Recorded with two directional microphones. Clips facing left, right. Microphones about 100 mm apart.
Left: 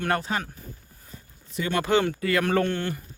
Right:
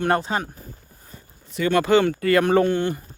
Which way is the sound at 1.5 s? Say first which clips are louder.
Right 5 dB; 75° right (ahead or behind).